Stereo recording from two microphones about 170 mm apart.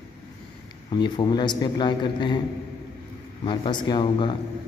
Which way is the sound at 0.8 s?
25° left (ahead or behind).